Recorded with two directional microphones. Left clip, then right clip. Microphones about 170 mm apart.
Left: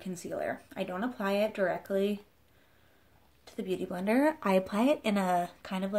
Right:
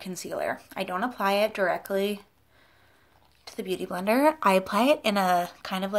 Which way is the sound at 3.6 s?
15° left (ahead or behind).